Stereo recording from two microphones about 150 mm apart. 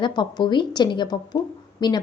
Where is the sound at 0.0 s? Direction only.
30° left (ahead or behind).